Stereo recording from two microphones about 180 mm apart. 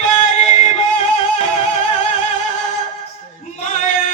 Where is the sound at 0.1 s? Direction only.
40° left (ahead or behind).